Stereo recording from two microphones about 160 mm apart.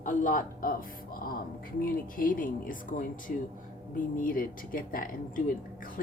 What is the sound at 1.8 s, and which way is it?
A woman's voice, 60° left (ahead or behind).